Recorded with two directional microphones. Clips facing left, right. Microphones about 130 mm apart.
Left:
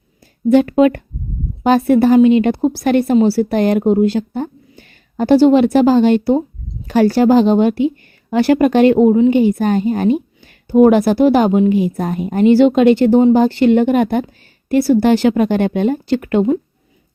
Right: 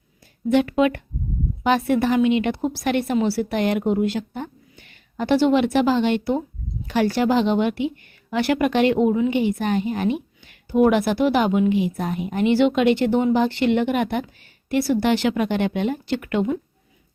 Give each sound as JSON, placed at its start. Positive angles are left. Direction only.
{"t": 0.5, "sound": "speech", "side_deg": 40}